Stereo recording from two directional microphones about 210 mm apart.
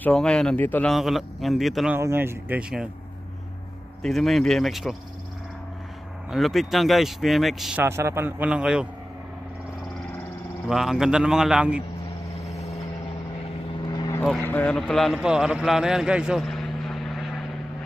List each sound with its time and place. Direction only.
0.0 s speech: 5° left (ahead or behind)
2.0 s speech: 10° right (ahead or behind)
4.0 s speech: centre (ahead or behind)
6.3 s speech: centre (ahead or behind)
10.7 s speech: centre (ahead or behind)
13.8 s vehicle: 20° left (ahead or behind)
14.2 s a man's voice: 5° left (ahead or behind)